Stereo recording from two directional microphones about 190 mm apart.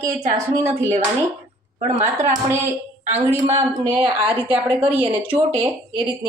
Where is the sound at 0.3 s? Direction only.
15° right (ahead or behind).